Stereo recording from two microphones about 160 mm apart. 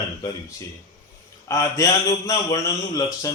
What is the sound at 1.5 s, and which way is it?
Speech, 20° left (ahead or behind).